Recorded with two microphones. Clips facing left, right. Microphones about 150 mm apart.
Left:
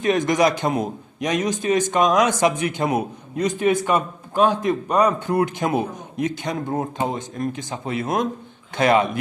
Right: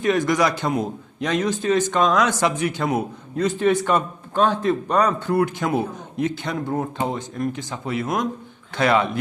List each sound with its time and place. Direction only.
0.0 s a man's voice: 20° left (ahead or behind)